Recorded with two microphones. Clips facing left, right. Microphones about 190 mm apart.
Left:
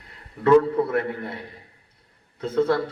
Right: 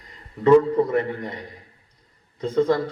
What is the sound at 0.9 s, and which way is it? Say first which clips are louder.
Speech: right 2 dB; 5° left (ahead or behind).